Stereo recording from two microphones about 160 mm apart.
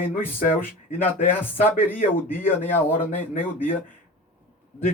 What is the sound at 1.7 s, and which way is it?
Speech, 60° left (ahead or behind).